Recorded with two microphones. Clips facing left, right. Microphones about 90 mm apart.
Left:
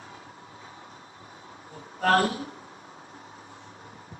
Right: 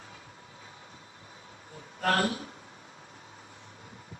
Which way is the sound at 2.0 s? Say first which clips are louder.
Left 5 dB; 35° left (ahead or behind).